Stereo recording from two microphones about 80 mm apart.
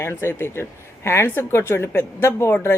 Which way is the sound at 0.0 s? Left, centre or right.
Left.